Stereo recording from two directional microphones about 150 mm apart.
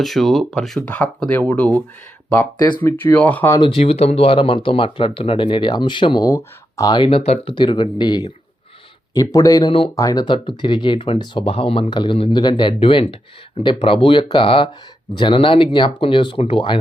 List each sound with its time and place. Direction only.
0.0 s speech: centre (ahead or behind)
2.8 s speech: 10° left (ahead or behind)
3.6 s speech: 40° left (ahead or behind)
7.2 s speech: 45° left (ahead or behind)
7.5 s speech: 30° left (ahead or behind)